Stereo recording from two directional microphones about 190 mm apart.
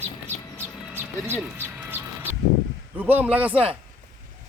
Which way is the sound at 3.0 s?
10° right (ahead or behind).